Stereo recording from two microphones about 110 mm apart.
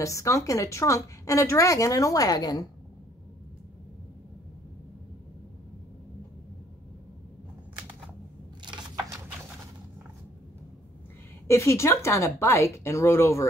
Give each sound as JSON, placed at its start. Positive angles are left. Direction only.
{"t": 0.0, "sound": "a woman's voice", "side_deg": 30}
{"t": 11.4, "sound": "a woman's voice", "side_deg": 25}